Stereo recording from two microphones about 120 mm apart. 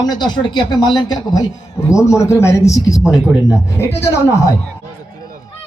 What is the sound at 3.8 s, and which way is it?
Speech, 20° left (ahead or behind).